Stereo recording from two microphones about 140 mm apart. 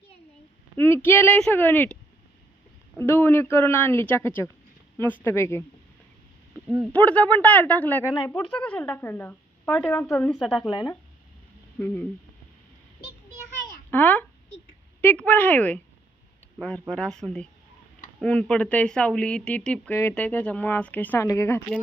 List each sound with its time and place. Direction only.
0.8 s speech: 15° left (ahead or behind)
3.0 s speech: 15° left (ahead or behind)
6.9 s speech: 10° left (ahead or behind)
10.4 s speech: centre (ahead or behind)
10.7 s speech: 30° left (ahead or behind)
11.8 s speech: 10° left (ahead or behind)
13.9 s speech: 10° left (ahead or behind)